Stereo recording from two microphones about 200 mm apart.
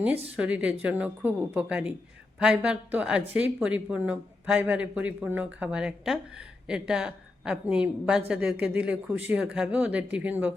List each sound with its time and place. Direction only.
0.3 s a woman's voice: 5° right (ahead or behind)